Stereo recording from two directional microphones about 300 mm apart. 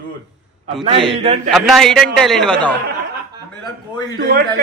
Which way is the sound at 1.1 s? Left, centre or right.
Right.